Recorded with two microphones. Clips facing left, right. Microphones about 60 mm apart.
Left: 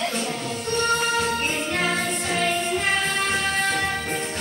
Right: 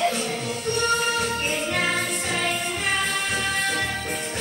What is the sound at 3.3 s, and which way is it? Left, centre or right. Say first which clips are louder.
Music: left 2 dB; centre.